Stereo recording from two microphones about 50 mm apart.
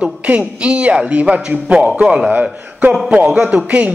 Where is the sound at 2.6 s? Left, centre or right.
Right.